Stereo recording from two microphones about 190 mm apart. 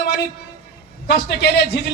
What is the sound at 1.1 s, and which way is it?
Speech, 60° left (ahead or behind).